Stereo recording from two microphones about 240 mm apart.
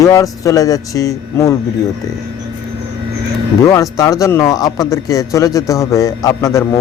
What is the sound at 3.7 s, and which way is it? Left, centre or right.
Speech, centre.